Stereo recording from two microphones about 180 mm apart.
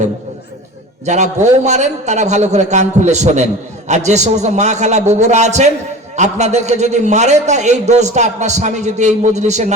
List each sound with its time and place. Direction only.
1.0 s a man's voice: 40° right (ahead or behind)